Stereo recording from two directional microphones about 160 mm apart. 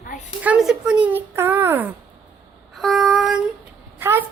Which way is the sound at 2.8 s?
Centre (ahead or behind).